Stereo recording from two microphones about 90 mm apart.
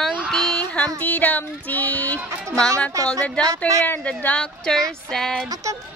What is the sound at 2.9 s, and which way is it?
Speech, 40° right (ahead or behind).